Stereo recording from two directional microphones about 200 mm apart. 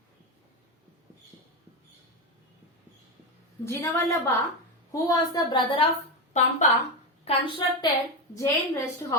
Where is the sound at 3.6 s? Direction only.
15° left (ahead or behind).